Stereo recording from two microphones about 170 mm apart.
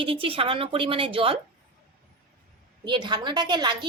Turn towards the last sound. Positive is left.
turn(degrees=-25)  # may be behind; listen again after turning